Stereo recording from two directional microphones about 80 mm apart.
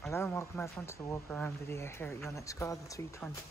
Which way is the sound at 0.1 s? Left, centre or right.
Left.